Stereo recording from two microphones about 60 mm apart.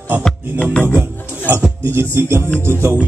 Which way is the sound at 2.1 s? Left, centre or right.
Right.